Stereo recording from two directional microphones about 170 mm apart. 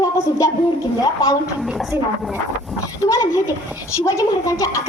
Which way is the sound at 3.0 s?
20° left (ahead or behind).